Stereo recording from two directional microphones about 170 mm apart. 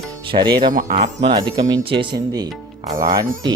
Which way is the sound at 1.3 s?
25° right (ahead or behind).